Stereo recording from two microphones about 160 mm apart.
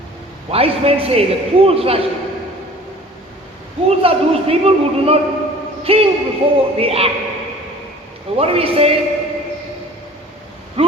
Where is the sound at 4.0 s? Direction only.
35° right (ahead or behind).